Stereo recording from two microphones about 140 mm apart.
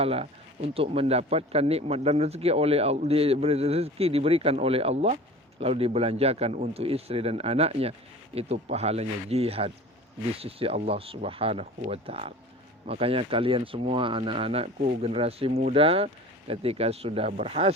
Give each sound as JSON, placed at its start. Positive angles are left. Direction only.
{"t": 0.0, "sound": "speech", "side_deg": -45}